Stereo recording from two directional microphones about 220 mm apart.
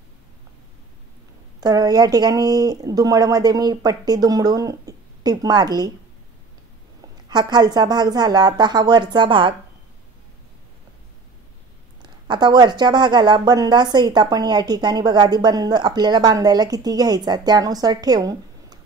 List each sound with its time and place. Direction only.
1.6 s speech: 15° right (ahead or behind)
7.2 s speech: 20° right (ahead or behind)
12.0 s speech: 20° right (ahead or behind)